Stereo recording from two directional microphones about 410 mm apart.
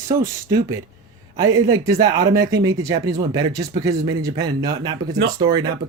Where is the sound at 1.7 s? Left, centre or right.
Centre.